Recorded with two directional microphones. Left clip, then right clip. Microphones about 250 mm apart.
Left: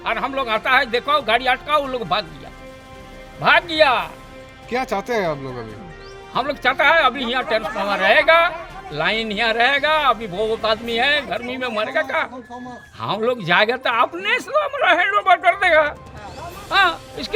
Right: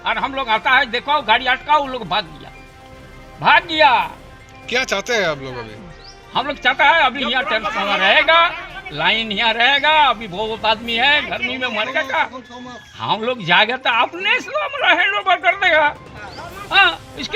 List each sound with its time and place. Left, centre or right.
0.0 s speech: left
3.4 s speech: left
4.7 s speech: left
6.3 s speech: left